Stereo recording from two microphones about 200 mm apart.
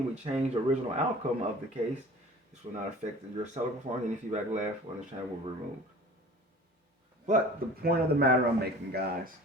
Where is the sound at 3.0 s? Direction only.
35° right (ahead or behind).